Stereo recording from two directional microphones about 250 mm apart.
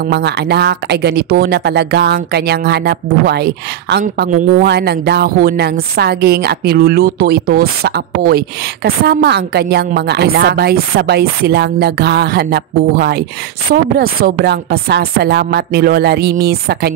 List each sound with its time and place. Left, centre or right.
0.0 s speech: right